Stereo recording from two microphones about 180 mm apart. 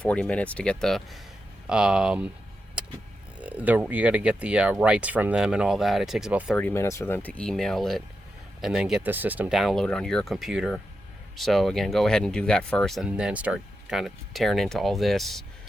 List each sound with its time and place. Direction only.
0.0 s speech: 5° left (ahead or behind)
3.4 s speech: 10° right (ahead or behind)
6.6 s speech: 10° left (ahead or behind)